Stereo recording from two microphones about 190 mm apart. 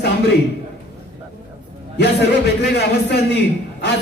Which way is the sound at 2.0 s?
60° left (ahead or behind).